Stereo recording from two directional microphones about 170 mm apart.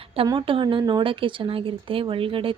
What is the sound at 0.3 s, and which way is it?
Speech, 30° right (ahead or behind).